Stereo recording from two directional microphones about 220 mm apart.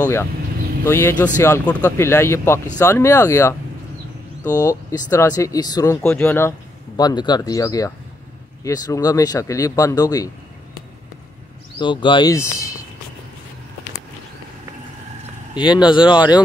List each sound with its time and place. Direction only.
0.0 s speech: 10° left (ahead or behind)
11.8 s speech: 20° left (ahead or behind)
15.5 s speech: 20° left (ahead or behind)